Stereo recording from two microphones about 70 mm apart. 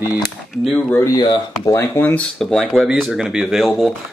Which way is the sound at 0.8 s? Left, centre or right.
Left.